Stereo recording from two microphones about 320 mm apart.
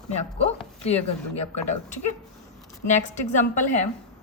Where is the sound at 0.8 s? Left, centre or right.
Centre.